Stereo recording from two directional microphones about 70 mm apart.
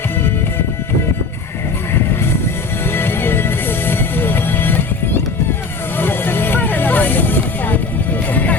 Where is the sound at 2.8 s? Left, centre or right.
Left.